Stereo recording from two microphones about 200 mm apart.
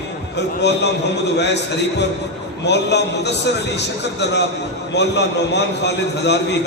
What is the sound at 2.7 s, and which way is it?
A man's voice, 60° left (ahead or behind).